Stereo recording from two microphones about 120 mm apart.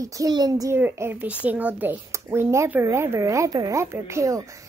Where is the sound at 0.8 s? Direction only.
15° right (ahead or behind).